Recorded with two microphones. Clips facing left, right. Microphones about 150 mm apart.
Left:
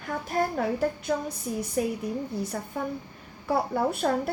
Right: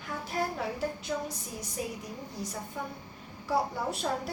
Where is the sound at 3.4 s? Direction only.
60° left (ahead or behind).